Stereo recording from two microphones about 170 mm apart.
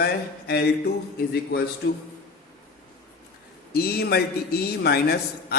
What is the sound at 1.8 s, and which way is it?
Speech, 90° left.